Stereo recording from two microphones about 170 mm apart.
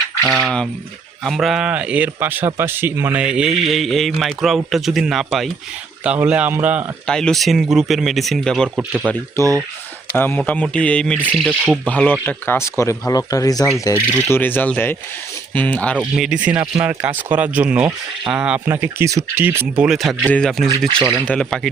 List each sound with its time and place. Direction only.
0.3 s speech: 5° left (ahead or behind)
7.1 s speech: 5° left (ahead or behind)
10.2 s speech: 10° left (ahead or behind)
11.3 s speech: 5° right (ahead or behind)
16.0 s speech: 5° right (ahead or behind)